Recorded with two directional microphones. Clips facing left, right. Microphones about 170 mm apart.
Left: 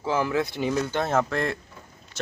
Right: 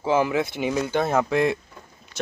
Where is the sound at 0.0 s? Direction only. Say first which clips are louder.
Right 3 dB; 20° right (ahead or behind).